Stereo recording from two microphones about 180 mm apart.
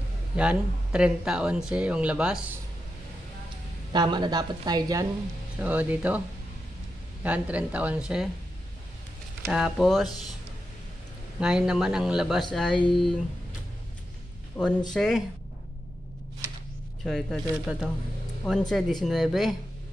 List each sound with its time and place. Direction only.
0.4 s speech: 5° right (ahead or behind)
3.9 s a woman's voice: 25° right (ahead or behind)
5.6 s speech: 10° right (ahead or behind)
7.2 s speech: 5° right (ahead or behind)
9.5 s speech: centre (ahead or behind)
11.3 s speech: 5° right (ahead or behind)
17.0 s speech: centre (ahead or behind)